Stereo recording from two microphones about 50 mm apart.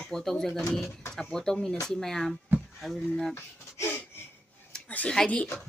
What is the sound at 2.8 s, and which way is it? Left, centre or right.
Speech, centre.